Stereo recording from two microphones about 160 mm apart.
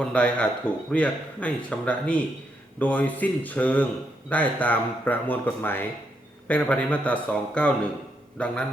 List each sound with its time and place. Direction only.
0.0 s speech: 5° left (ahead or behind)